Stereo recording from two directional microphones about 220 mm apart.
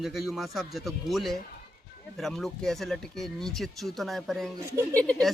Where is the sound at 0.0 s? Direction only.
Centre (ahead or behind).